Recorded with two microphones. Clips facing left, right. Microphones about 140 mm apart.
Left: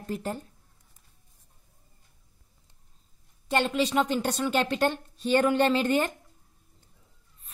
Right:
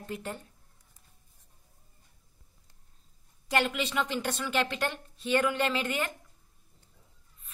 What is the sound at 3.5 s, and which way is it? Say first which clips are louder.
A woman's voice: left 4 dB; 30° left (ahead or behind).